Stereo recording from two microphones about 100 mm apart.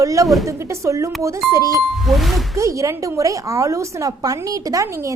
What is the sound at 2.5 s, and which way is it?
A woman's voice, 30° right (ahead or behind).